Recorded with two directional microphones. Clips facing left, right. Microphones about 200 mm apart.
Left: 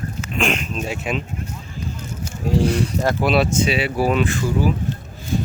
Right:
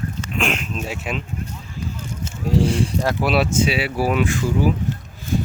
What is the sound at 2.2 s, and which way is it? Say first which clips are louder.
Speech: even; 30° right (ahead or behind).